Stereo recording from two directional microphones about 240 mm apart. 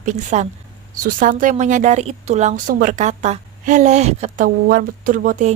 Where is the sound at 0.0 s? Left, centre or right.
Right.